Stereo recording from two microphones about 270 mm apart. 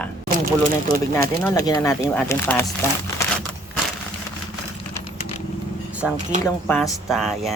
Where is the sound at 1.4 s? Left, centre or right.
Centre.